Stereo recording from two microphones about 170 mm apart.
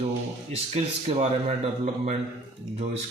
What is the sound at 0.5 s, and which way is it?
Speech, 35° right (ahead or behind).